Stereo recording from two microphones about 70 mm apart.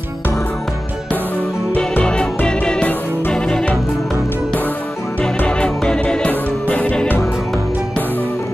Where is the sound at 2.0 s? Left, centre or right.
Centre.